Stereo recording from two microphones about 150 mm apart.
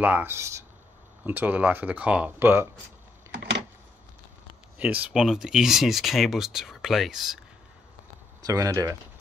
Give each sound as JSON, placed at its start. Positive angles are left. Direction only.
{"t": 0.0, "sound": "speech", "side_deg": -15}
{"t": 4.7, "sound": "speech", "side_deg": -10}
{"t": 8.4, "sound": "speech", "side_deg": -25}